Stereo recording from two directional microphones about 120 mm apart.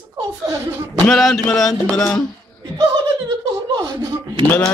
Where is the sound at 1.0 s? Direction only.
Centre (ahead or behind).